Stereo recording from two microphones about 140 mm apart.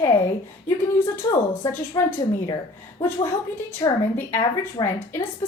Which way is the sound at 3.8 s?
25° left (ahead or behind).